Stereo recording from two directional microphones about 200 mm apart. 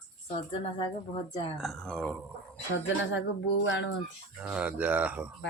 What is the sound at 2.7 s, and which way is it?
Speech, 65° left (ahead or behind).